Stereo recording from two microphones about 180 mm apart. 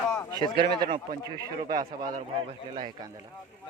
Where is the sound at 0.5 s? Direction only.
25° right (ahead or behind).